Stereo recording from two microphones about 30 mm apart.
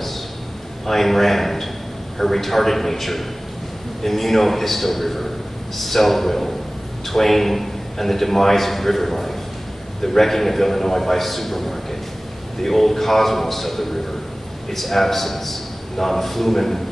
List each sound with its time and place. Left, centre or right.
0.8 s a man's voice: centre